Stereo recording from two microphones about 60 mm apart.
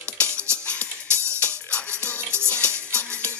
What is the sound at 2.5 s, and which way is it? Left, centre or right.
Music, left.